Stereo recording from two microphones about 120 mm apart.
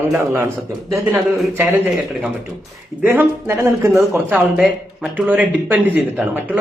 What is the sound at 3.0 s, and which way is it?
Speech, 20° right (ahead or behind).